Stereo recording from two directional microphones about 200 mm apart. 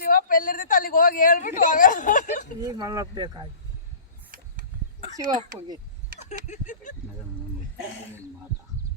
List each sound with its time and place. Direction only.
0.0 s speech: 45° left (ahead or behind)
2.6 s speech: 15° right (ahead or behind)
6.2 s a sound: 40° left (ahead or behind)